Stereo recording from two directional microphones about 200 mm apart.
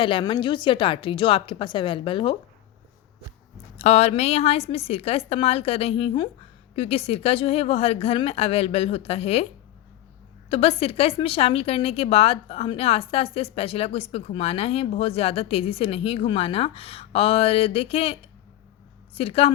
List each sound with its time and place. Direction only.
0.0 s a woman's voice: 25° left (ahead or behind)
3.8 s a woman's voice: 30° left (ahead or behind)
10.5 s a woman's voice: 30° left (ahead or behind)